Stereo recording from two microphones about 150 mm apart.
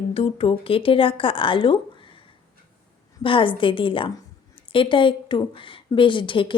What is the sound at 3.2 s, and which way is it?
Speech, 35° left (ahead or behind).